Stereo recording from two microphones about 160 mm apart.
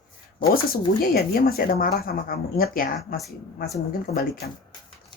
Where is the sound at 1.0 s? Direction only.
65° left (ahead or behind).